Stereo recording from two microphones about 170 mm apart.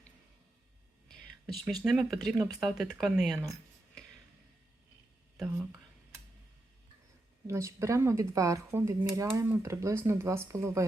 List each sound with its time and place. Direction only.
1.0 s a sound: centre (ahead or behind)
1.8 s speech: centre (ahead or behind)
7.4 s speech: 15° right (ahead or behind)